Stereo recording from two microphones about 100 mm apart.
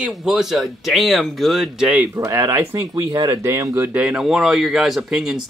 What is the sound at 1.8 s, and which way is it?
Speech, 15° right (ahead or behind).